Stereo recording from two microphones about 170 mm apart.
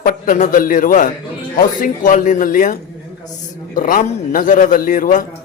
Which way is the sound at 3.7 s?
55° left (ahead or behind).